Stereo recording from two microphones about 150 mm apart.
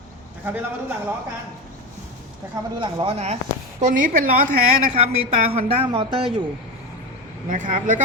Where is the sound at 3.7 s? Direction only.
55° right (ahead or behind).